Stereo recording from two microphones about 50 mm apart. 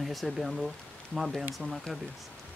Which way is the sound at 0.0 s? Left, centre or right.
Centre.